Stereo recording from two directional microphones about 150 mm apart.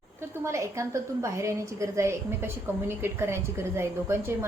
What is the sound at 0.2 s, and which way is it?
A woman's voice, 20° right (ahead or behind).